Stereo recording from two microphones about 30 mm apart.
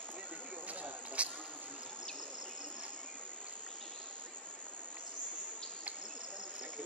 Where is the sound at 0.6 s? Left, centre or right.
Right.